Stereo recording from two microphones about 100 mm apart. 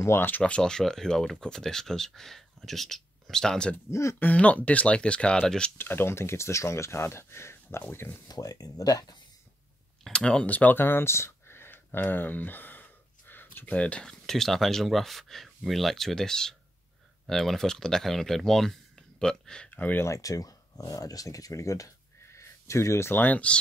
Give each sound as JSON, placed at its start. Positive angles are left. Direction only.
{"t": 0.0, "sound": "speech", "side_deg": 25}
{"t": 0.4, "sound": "speech", "side_deg": 10}
{"t": 3.7, "sound": "speech", "side_deg": 30}
{"t": 4.3, "sound": "speech", "side_deg": 15}
{"t": 5.8, "sound": "speech", "side_deg": 20}
{"t": 8.3, "sound": "speech", "side_deg": 40}
{"t": 10.0, "sound": "speech", "side_deg": 10}
{"t": 20.1, "sound": "speech", "side_deg": 35}